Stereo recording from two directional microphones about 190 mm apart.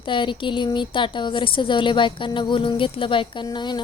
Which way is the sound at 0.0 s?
25° left (ahead or behind).